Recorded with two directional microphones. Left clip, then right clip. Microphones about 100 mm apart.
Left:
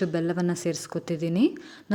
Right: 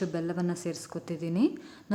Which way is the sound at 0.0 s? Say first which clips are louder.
Left 5 dB; 35° left (ahead or behind).